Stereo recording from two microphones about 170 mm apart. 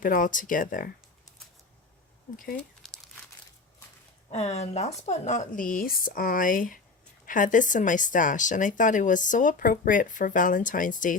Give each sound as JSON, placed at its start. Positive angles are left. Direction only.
{"t": 0.0, "sound": "speech", "side_deg": 50}
{"t": 2.3, "sound": "speech", "side_deg": 55}
{"t": 4.3, "sound": "speech", "side_deg": 40}